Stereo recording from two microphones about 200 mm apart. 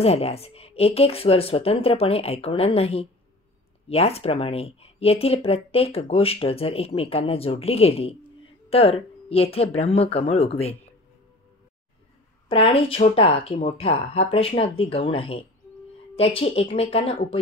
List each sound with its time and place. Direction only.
0.0 s a woman's voice: 30° left (ahead or behind)
12.4 s speech: 25° left (ahead or behind)